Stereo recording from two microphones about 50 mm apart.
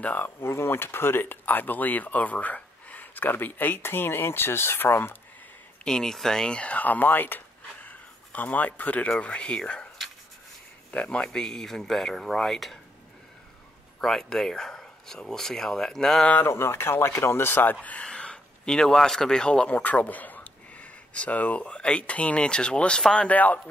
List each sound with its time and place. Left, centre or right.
0.0 s speech: left
0.4 s speech: left
5.9 s speech: centre
10.9 s speech: left
11.2 s speech: centre
14.0 s speech: centre
16.4 s speech: left
17.0 s speech: left
18.0 s speech: centre
19.8 s speech: left; by 23.2 s centre
23.2 s speech: left